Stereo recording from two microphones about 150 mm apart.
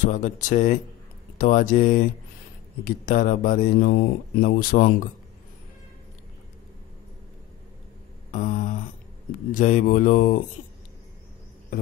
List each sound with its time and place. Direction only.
0.0 s speech: 60° left (ahead or behind)
8.3 s a sound: 60° left (ahead or behind)
9.5 s speech: 60° left (ahead or behind)